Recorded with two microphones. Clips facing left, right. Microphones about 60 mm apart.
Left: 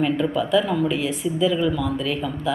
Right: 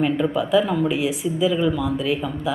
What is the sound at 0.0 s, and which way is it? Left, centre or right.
Speech, centre.